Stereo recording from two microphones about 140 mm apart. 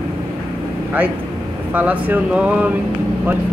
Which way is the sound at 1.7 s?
10° right (ahead or behind).